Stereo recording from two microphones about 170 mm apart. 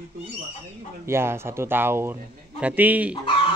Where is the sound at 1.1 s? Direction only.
15° right (ahead or behind).